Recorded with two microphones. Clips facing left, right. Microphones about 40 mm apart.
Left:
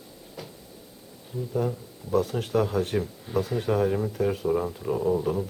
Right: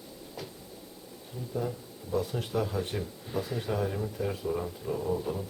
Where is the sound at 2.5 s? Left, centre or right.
Left.